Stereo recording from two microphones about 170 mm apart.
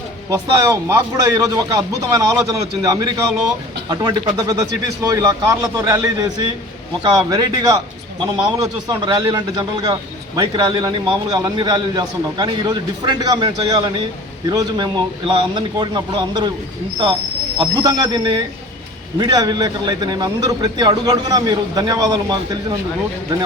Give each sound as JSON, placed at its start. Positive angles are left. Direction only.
{"t": 0.3, "sound": "speech", "side_deg": -15}
{"t": 17.6, "sound": "speech", "side_deg": -25}